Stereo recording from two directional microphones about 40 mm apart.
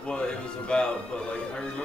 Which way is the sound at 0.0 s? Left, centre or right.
Left.